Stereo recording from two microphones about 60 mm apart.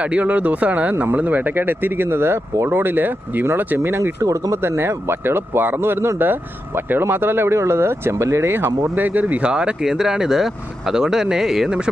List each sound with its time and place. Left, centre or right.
0.0 s speech: right
4.2 s speech: right
4.6 s speech: right
8.9 s speech: right; by 11.9 s centre